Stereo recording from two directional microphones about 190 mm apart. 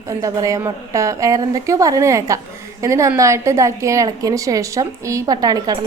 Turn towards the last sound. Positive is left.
turn(degrees=-20)  # may be behind; listen again after turning